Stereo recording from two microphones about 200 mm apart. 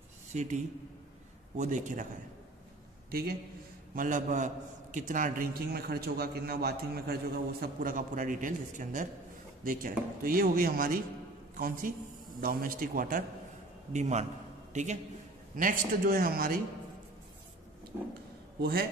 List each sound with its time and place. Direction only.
0.3 s speech: 35° right (ahead or behind)
3.1 s a man's voice: 50° right (ahead or behind)
18.6 s a man's voice: 50° right (ahead or behind)